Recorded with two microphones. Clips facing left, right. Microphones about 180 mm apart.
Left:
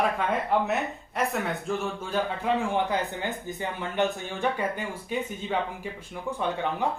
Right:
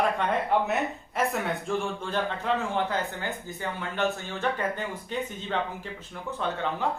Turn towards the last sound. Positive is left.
turn(degrees=15)  # may be behind; listen again after turning